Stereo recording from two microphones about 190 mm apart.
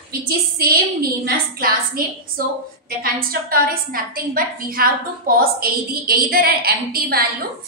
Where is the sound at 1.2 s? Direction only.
50° right (ahead or behind).